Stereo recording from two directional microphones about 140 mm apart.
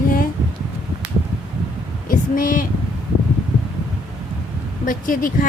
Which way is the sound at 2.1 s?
75° left (ahead or behind).